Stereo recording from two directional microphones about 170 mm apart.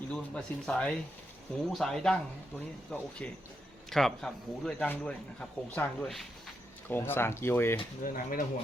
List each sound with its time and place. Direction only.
0.1 s a man's voice: 5° left (ahead or behind)
8.0 s speech: 55° left (ahead or behind)